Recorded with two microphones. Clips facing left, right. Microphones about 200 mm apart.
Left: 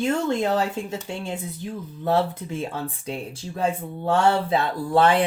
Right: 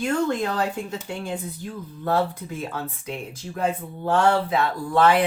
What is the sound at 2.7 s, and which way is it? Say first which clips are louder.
Speech: left 1 dB; 30° left (ahead or behind).